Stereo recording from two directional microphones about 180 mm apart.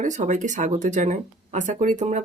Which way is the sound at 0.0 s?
40° right (ahead or behind).